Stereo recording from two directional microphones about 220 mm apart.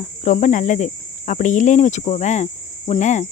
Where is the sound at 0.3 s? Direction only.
35° left (ahead or behind).